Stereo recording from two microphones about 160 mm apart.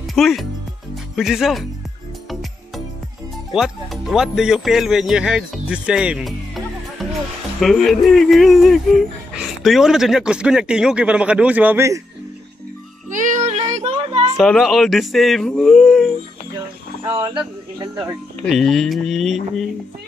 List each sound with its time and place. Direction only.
0.1 s speech: centre (ahead or behind)
3.5 s speech: centre (ahead or behind)
13.1 s music: 50° right (ahead or behind)
13.7 s a sound: 45° right (ahead or behind)
14.3 s speech: centre (ahead or behind)
17.2 s speech: 30° right (ahead or behind)
18.5 s speech: centre (ahead or behind)